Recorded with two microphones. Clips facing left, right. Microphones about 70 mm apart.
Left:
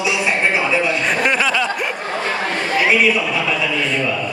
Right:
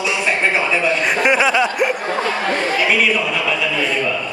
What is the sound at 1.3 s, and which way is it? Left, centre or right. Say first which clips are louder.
Speech: right 6 dB; centre.